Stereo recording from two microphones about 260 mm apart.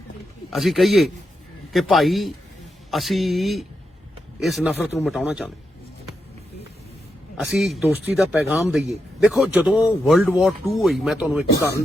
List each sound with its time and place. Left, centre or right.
0.5 s speech: centre
7.3 s speech: centre